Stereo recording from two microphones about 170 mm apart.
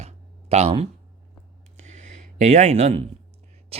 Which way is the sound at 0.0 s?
40° right (ahead or behind).